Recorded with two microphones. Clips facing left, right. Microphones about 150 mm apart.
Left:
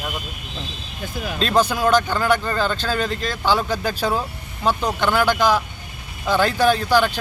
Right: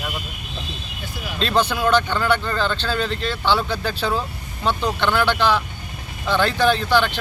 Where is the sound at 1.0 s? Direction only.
50° left (ahead or behind).